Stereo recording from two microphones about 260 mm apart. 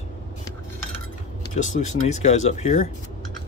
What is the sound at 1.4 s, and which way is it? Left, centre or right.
Speech, left.